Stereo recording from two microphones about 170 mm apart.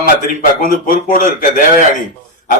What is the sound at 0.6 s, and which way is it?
A man's voice, 50° left (ahead or behind).